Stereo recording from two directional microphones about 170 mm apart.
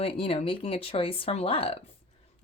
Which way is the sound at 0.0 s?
35° left (ahead or behind).